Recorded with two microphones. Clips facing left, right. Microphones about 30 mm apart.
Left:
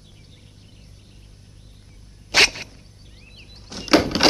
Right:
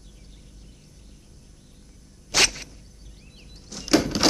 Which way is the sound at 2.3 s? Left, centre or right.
Left.